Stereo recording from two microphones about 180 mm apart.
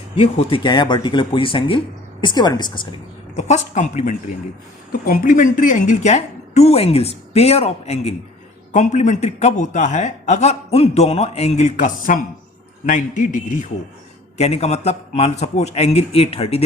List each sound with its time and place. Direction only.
0.2 s speech: 30° left (ahead or behind)
3.3 s a man's voice: 40° left (ahead or behind)